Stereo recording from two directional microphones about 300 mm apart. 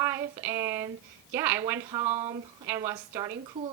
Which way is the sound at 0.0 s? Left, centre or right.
Centre.